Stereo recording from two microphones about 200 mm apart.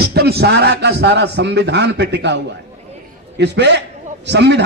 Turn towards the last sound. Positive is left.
turn(degrees=-60)  # may be behind; listen again after turning